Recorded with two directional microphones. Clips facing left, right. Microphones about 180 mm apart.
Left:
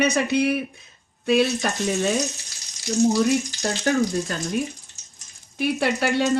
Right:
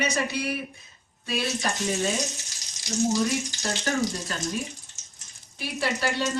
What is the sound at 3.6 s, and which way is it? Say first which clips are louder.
Speech: left 5 dB; 45° left (ahead or behind).